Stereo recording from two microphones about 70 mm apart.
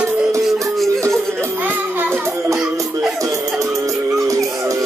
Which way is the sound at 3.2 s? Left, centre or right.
Right.